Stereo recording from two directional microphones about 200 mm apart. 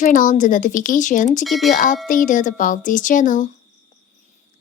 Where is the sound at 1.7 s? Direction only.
40° left (ahead or behind).